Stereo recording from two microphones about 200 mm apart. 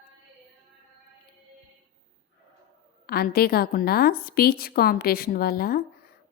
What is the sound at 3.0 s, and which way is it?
A woman's voice, 50° left (ahead or behind).